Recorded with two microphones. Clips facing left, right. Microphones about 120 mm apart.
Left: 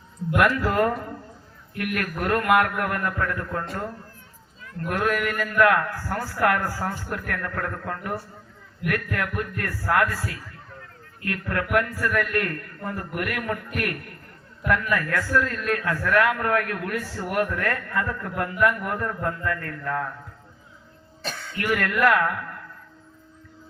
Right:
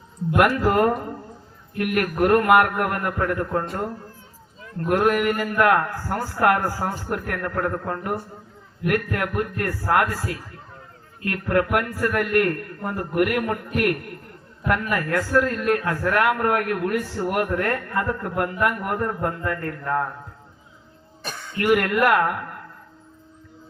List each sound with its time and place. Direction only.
0.3 s a man's voice: 35° right (ahead or behind)
6.3 s speech: 30° right (ahead or behind)
6.9 s a man's voice: 35° right (ahead or behind)
21.6 s speech: 20° right (ahead or behind)
21.8 s speech: 30° right (ahead or behind)